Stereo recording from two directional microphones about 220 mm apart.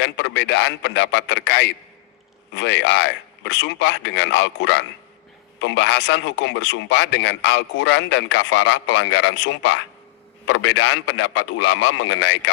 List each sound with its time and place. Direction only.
0.0 s a man's voice: 55° left (ahead or behind)